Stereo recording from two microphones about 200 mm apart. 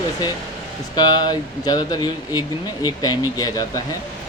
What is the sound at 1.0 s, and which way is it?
Speech, 20° left (ahead or behind).